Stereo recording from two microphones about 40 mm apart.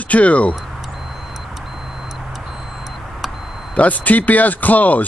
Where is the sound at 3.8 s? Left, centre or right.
Left.